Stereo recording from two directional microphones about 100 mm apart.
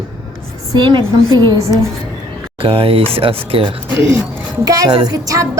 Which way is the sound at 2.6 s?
70° right (ahead or behind).